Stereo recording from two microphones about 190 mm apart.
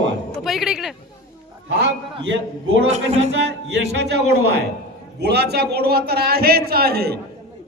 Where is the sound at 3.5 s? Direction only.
65° right (ahead or behind).